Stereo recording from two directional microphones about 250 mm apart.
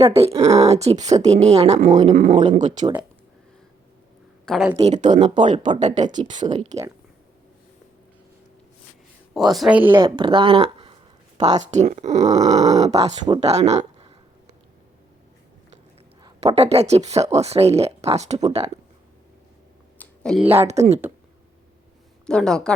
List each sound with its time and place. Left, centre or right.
0.1 s speech: right
4.4 s speech: centre
4.8 s speech: right
9.3 s speech: centre; by 14.1 s right
16.2 s speech: right
20.0 s a sound: centre
20.7 s speech: right
22.3 s speech: centre